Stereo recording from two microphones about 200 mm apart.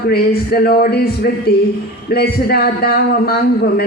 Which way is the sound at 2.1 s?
50° left (ahead or behind).